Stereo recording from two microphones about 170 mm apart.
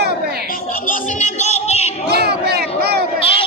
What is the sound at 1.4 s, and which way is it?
Music, 40° left (ahead or behind).